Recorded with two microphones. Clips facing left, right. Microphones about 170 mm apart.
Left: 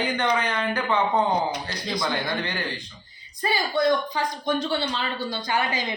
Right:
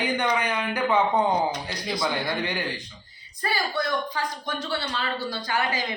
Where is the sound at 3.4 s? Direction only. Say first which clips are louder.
Left 5 dB; 20° left (ahead or behind).